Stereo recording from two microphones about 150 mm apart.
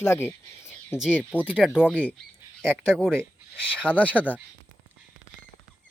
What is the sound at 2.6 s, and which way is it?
Speech, 5° left (ahead or behind).